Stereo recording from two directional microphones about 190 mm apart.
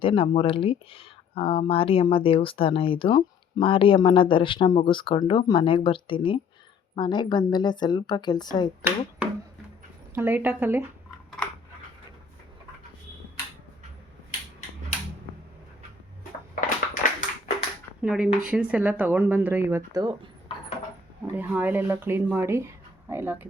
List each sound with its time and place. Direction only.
0.0 s speech: 30° left (ahead or behind)
8.8 s speech: 5° right (ahead or behind)
16.6 s a sound: 45° left (ahead or behind)
18.0 s speech: 5° right (ahead or behind); by 20.3 s 20° right (ahead or behind)
21.3 s speech: 10° right (ahead or behind)